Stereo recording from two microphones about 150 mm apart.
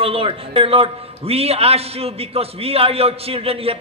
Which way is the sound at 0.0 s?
35° right (ahead or behind).